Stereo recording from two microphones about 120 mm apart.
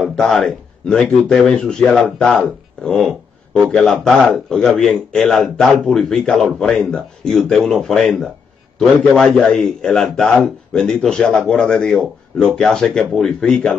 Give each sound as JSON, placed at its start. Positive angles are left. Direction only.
{"t": 0.0, "sound": "speech", "side_deg": 5}